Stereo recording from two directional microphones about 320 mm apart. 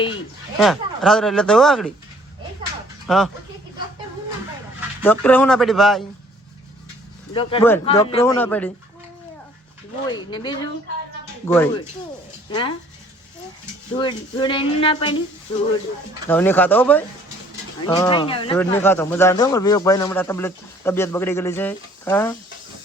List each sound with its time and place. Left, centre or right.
0.6 s speech: centre
3.1 s speech: centre
5.0 s speech: centre
7.3 s a man's voice: centre
10.1 s a man's voice: centre
13.9 s a man's voice: centre
16.3 s a man's voice: centre